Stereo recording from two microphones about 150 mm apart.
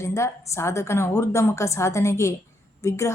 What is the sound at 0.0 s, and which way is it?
A woman's voice, 20° left (ahead or behind).